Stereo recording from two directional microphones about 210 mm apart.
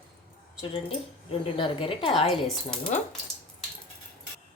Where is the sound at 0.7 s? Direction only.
25° left (ahead or behind).